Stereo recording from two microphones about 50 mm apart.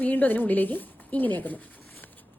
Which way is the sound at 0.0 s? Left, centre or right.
Left.